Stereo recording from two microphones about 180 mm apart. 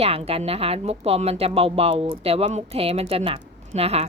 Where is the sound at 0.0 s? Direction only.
35° right (ahead or behind).